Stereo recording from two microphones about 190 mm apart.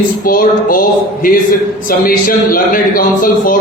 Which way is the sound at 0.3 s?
50° left (ahead or behind).